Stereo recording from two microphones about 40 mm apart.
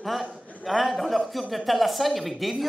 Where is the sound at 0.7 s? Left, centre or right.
Centre.